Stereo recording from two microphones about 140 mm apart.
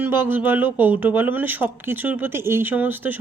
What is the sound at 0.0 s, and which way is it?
A woman's voice, 15° right (ahead or behind).